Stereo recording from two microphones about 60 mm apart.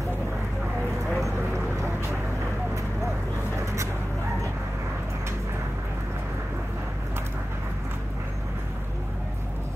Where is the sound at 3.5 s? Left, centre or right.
Right.